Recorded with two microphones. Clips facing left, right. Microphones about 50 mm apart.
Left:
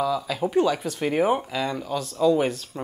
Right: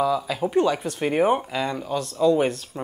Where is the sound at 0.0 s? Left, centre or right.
Centre.